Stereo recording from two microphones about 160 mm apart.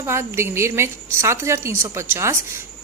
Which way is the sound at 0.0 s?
15° right (ahead or behind).